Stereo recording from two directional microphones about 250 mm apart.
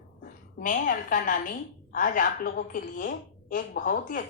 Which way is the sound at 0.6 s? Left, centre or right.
Left.